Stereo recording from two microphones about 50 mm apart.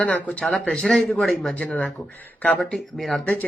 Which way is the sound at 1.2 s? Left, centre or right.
Centre.